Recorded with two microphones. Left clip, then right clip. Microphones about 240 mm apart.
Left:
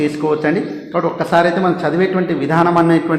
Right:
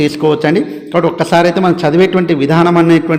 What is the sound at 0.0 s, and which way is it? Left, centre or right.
A man's voice, right.